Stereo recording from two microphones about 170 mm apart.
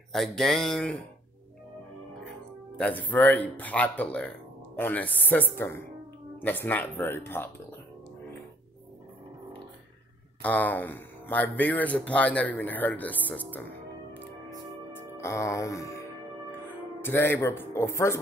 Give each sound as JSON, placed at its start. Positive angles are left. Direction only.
{"t": 0.1, "sound": "a sound", "side_deg": 0}
{"t": 2.8, "sound": "speech", "side_deg": 10}
{"t": 10.4, "sound": "speech", "side_deg": 10}
{"t": 14.9, "sound": "music", "side_deg": 15}
{"t": 17.0, "sound": "speech", "side_deg": 15}